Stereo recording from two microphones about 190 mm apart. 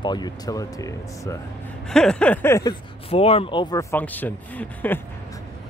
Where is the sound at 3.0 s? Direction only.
30° left (ahead or behind); by 5.0 s 10° left (ahead or behind).